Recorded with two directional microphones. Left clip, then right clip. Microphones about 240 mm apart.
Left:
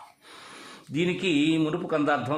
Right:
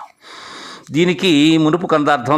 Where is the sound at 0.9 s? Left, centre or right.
Right.